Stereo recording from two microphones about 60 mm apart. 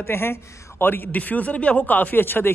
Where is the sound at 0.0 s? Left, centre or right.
Left.